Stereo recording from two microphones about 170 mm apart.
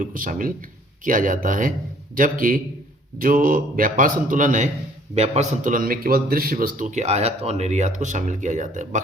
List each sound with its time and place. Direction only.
0.0 s a man's voice: 50° right (ahead or behind)